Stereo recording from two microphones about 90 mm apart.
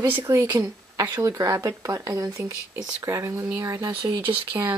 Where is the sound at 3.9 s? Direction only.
65° right (ahead or behind).